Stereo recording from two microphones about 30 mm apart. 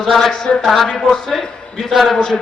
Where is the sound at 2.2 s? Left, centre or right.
Left.